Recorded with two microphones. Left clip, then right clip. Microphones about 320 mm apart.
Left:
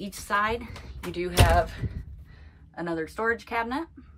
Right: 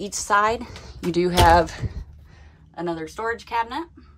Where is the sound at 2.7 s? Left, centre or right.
Centre.